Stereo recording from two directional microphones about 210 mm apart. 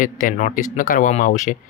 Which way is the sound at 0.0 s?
40° left (ahead or behind).